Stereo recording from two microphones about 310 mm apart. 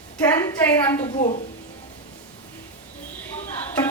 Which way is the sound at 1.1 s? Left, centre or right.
Left.